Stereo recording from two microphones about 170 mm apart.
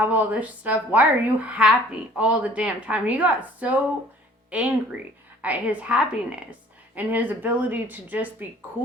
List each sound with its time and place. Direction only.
0.0 s a woman's voice: 10° right (ahead or behind)